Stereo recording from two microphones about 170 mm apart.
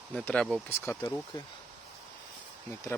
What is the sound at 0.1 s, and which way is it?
Speech, 5° left (ahead or behind).